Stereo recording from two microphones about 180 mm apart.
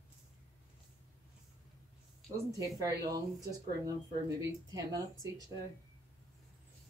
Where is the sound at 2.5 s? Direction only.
20° right (ahead or behind).